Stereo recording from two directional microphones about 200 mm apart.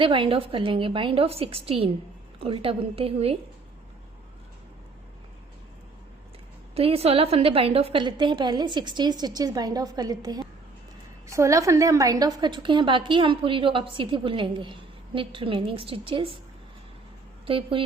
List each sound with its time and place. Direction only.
0.0 s a woman's voice: 25° right (ahead or behind)
6.7 s a woman's voice: 30° right (ahead or behind)
17.4 s speech: 25° right (ahead or behind)